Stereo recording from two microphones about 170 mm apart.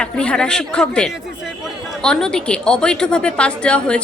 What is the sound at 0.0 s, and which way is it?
A woman's voice, 5° left (ahead or behind).